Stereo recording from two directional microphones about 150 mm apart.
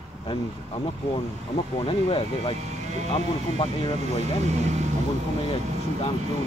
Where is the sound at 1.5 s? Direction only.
40° left (ahead or behind).